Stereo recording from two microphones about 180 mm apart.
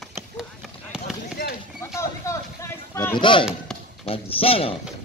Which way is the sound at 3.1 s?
25° left (ahead or behind).